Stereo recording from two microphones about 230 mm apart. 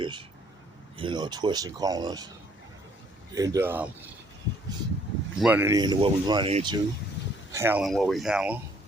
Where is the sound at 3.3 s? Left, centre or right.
Centre.